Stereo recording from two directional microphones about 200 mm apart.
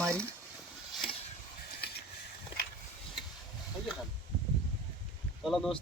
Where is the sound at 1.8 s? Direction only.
55° left (ahead or behind).